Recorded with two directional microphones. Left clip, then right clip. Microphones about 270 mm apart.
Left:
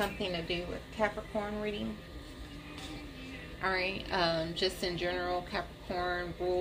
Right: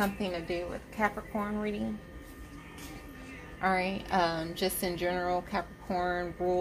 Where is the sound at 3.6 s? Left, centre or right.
Right.